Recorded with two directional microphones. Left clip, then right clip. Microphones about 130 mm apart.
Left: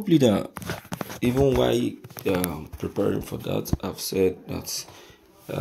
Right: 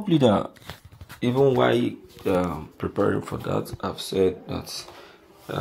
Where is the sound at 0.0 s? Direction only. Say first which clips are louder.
Even; 20° left (ahead or behind).